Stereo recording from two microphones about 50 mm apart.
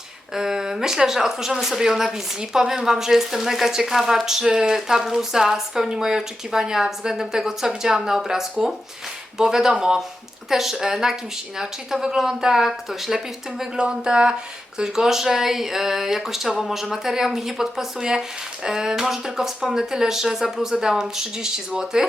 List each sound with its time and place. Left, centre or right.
0.3 s speech: centre
13.7 s speech: centre